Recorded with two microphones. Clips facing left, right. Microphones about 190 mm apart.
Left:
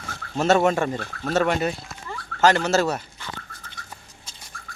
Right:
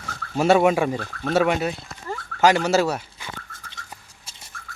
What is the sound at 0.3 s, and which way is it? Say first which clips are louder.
Speech: right 2 dB; 10° right (ahead or behind).